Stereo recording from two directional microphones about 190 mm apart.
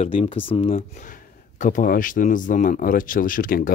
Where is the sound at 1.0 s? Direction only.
45° left (ahead or behind).